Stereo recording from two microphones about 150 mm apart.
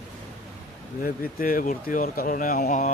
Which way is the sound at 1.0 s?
70° left (ahead or behind).